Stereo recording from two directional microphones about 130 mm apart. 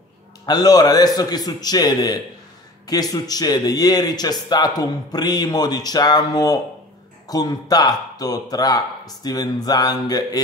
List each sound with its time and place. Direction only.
0.5 s a man's voice: 30° left (ahead or behind)